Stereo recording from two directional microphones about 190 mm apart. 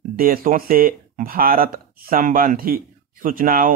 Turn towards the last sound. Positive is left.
turn(degrees=-45)  # may be behind; listen again after turning